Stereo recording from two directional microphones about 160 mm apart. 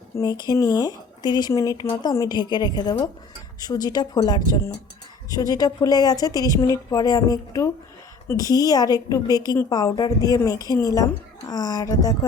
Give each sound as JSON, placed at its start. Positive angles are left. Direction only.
{"t": 0.2, "sound": "a woman's voice", "side_deg": 25}
{"t": 8.3, "sound": "a woman's voice", "side_deg": 25}